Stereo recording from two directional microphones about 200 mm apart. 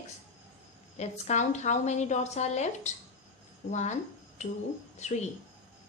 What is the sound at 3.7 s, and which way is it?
A woman's voice, 35° left (ahead or behind).